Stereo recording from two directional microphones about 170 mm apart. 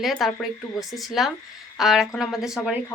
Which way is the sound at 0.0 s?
Centre (ahead or behind).